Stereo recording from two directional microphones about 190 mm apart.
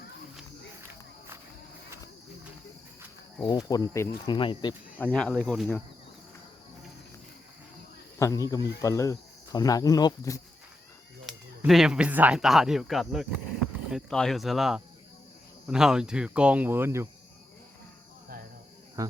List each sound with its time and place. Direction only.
3.7 s speech: 15° left (ahead or behind)
4.4 s speech: 25° left (ahead or behind)
4.9 s speech: 5° left (ahead or behind)
8.2 s speech: 20° left (ahead or behind)
11.3 s speech: centre (ahead or behind)
19.0 s speech: 15° right (ahead or behind)